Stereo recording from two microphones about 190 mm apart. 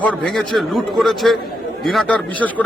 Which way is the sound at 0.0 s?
5° left (ahead or behind).